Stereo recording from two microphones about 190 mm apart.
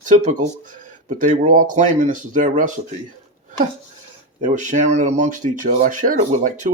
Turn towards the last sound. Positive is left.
turn(degrees=-45)  # may be behind; listen again after turning